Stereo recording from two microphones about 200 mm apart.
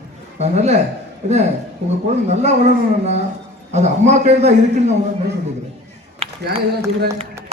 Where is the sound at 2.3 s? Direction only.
35° right (ahead or behind).